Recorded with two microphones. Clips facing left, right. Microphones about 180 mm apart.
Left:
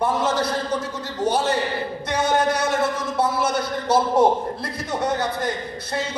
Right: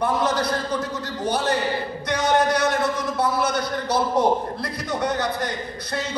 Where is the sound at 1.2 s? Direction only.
25° left (ahead or behind).